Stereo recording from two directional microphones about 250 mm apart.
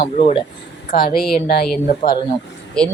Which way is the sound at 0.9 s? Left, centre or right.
Left.